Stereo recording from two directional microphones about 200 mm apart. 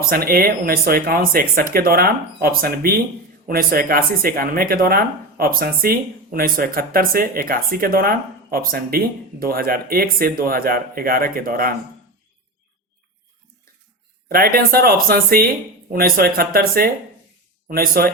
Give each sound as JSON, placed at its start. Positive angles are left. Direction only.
{"t": 0.1, "sound": "speech", "side_deg": -50}
{"t": 14.3, "sound": "speech", "side_deg": -45}